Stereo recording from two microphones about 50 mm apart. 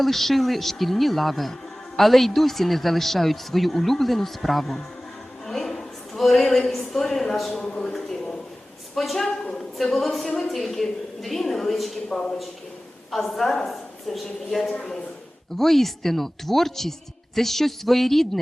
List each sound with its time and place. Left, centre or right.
0.0 s a woman's voice: centre
7.6 s a man's voice: centre
7.9 s a sound: centre
9.0 s speech: centre
12.0 s a man's voice: centre
13.1 s a woman's voice: centre